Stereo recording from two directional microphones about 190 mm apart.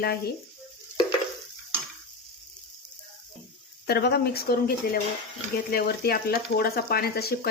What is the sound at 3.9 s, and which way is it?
Speech, 60° left (ahead or behind).